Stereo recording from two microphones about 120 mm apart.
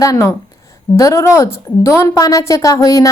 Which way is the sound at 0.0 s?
30° left (ahead or behind).